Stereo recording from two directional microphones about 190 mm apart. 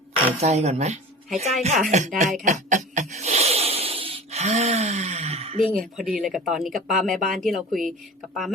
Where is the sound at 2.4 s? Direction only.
40° right (ahead or behind).